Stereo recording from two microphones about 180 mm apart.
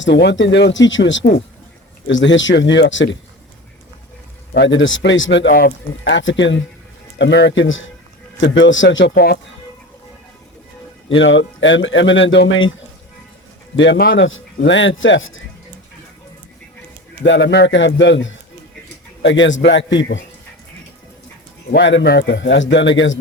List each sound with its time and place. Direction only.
0.0 s speech: 70° left (ahead or behind)
4.5 s speech: 85° left
5.5 s speech: 65° left (ahead or behind); by 6.6 s 90° left
7.2 s speech: 75° left (ahead or behind)
11.1 s speech: 90° left
13.7 s speech: 80° left
17.2 s speech: 80° left
21.7 s speech: 75° left (ahead or behind)